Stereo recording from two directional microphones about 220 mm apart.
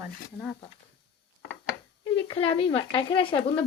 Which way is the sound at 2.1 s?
25° left (ahead or behind).